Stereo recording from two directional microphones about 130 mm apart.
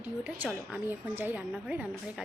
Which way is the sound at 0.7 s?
15° right (ahead or behind).